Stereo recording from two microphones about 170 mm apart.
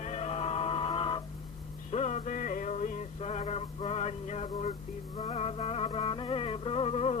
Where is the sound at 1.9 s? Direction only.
40° left (ahead or behind).